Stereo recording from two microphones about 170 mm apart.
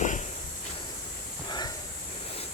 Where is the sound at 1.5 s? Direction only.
25° left (ahead or behind).